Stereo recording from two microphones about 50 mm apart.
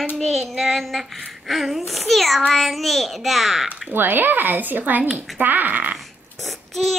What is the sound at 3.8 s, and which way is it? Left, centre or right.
Speech, right.